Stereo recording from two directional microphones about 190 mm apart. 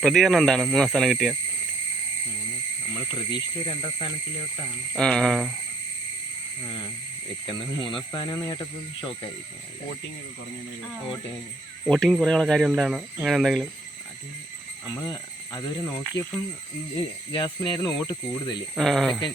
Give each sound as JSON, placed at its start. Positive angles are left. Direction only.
{"t": 0.0, "sound": "speech", "side_deg": 0}
{"t": 3.2, "sound": "speech", "side_deg": 25}
{"t": 4.9, "sound": "speech", "side_deg": 5}
{"t": 6.7, "sound": "speech", "side_deg": 25}
{"t": 11.9, "sound": "speech", "side_deg": 0}
{"t": 14.8, "sound": "speech", "side_deg": 20}
{"t": 17.3, "sound": "speech", "side_deg": 25}
{"t": 18.8, "sound": "speech", "side_deg": 0}